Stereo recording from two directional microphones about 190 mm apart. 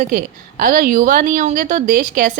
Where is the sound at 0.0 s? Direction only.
45° right (ahead or behind).